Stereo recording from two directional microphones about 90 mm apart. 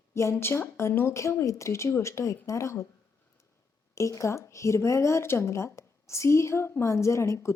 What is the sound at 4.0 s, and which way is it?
A woman's voice, 35° left (ahead or behind).